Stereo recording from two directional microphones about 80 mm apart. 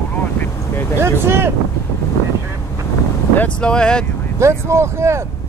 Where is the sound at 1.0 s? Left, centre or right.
Right.